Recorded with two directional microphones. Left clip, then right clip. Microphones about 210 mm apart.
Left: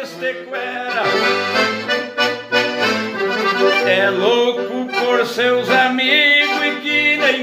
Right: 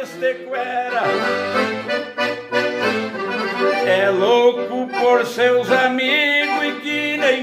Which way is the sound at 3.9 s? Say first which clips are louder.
Left 1 dB; 15° right (ahead or behind).